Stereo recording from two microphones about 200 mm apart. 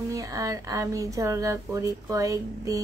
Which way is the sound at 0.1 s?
15° right (ahead or behind).